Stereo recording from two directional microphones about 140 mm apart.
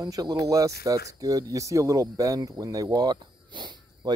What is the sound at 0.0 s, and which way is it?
Speech, 30° right (ahead or behind).